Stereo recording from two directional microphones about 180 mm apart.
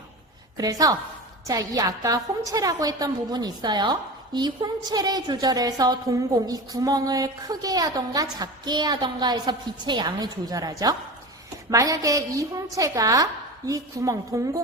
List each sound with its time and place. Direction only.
0.5 s a woman's voice: 20° right (ahead or behind)